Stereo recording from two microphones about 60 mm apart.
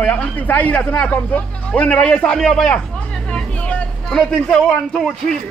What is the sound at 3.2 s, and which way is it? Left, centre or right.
Vehicle, centre.